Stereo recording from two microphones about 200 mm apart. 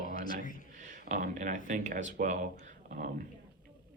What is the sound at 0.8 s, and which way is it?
A man's voice, 40° right (ahead or behind).